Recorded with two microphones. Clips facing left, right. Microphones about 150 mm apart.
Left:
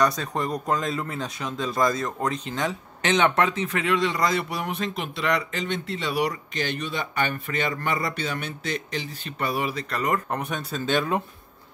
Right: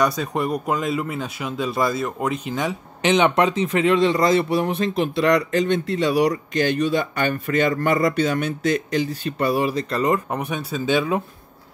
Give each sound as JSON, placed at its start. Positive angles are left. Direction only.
{"t": 0.0, "sound": "speech", "side_deg": -10}
{"t": 5.2, "sound": "speech", "side_deg": -40}
{"t": 10.3, "sound": "speech", "side_deg": -10}